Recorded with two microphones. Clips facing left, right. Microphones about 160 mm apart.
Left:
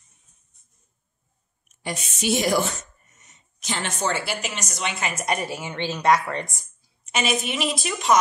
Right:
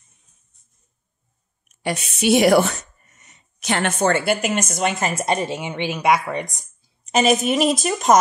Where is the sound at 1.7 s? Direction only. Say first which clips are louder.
Right 6 dB; 65° right (ahead or behind); by 6.7 s 15° right (ahead or behind).